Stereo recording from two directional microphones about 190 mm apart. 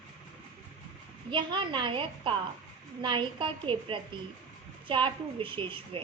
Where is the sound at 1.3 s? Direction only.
25° right (ahead or behind).